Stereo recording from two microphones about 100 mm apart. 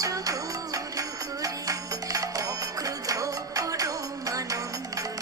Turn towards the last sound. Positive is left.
turn(degrees=-35)  # may be behind; listen again after turning